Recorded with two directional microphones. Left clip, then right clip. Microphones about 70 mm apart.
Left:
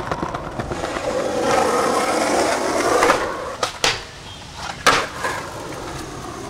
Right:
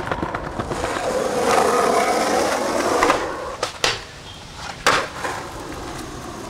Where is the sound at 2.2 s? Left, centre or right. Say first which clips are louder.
Left 1 dB; left.